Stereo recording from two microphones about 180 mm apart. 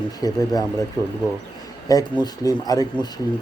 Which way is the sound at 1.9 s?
20° left (ahead or behind).